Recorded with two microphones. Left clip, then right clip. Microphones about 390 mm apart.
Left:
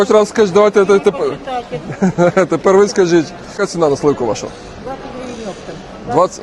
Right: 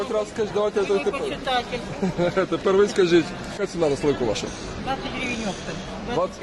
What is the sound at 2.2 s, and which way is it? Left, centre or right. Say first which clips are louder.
Speech: left 10 dB; left.